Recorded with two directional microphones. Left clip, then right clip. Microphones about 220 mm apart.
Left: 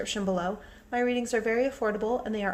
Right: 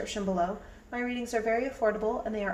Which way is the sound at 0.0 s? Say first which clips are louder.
Even; 45° left (ahead or behind).